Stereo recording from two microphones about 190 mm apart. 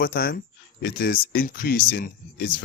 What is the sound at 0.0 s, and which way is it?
Speech, 50° left (ahead or behind).